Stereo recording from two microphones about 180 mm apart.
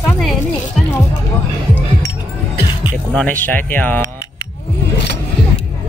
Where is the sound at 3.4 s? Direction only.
10° left (ahead or behind).